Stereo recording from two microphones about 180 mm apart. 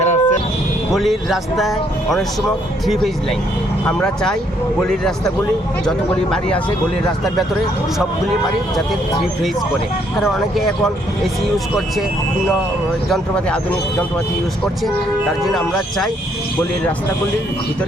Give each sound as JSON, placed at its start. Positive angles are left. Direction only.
{"t": 0.0, "sound": "vehicle", "side_deg": 40}
{"t": 0.9, "sound": "speech", "side_deg": 0}
{"t": 10.2, "sound": "speech", "side_deg": 0}
{"t": 13.1, "sound": "speech", "side_deg": 5}
{"t": 15.4, "sound": "speech", "side_deg": 0}